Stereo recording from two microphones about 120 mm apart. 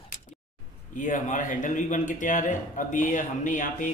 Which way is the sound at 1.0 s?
90° left.